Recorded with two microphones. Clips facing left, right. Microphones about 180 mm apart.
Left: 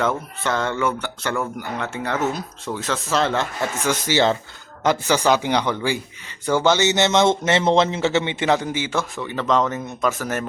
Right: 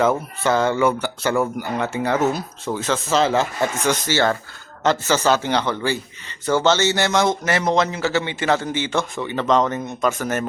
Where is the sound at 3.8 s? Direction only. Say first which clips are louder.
Left 2 dB; 10° left (ahead or behind).